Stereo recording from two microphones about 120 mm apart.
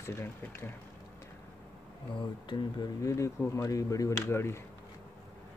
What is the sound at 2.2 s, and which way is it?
Speech, 40° left (ahead or behind).